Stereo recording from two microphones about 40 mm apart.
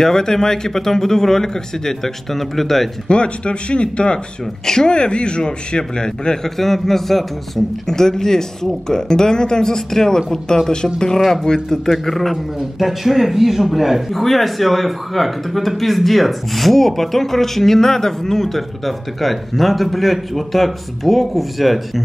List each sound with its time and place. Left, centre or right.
0.0 s speech: centre
3.1 s a man's voice: left
6.6 s speech: centre